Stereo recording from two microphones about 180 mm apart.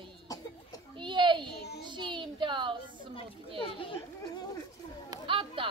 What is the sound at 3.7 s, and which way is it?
Children playing, 30° left (ahead or behind).